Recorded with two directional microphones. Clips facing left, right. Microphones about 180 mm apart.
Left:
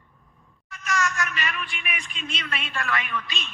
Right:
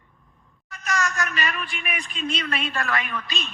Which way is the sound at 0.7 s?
35° right (ahead or behind).